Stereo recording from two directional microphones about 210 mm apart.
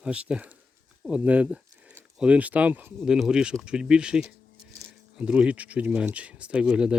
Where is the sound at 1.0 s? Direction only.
5° right (ahead or behind).